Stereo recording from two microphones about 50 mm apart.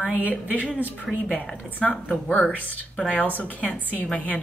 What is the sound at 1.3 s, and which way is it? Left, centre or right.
A woman's voice, left.